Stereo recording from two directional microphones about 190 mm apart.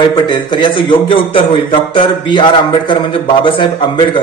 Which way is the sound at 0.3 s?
25° left (ahead or behind).